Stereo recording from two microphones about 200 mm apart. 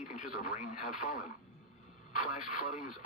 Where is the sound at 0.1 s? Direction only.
45° left (ahead or behind).